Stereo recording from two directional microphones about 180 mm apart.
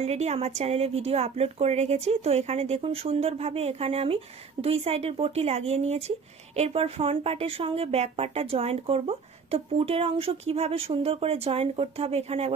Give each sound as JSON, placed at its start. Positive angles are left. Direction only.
{"t": 0.0, "sound": "a woman's voice", "side_deg": -40}